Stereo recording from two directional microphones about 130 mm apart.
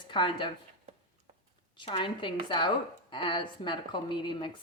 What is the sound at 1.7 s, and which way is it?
Speech, 40° left (ahead or behind).